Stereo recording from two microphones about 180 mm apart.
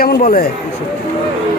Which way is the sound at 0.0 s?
55° left (ahead or behind).